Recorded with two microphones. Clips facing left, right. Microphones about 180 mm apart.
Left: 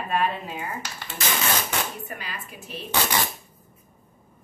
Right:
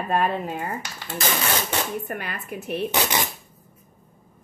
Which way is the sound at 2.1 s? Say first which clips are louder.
Right 6 dB; 55° right (ahead or behind).